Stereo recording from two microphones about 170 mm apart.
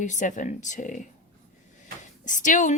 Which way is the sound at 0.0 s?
45° left (ahead or behind).